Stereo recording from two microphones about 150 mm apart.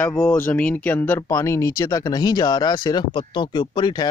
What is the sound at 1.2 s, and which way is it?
Speech, 25° left (ahead or behind).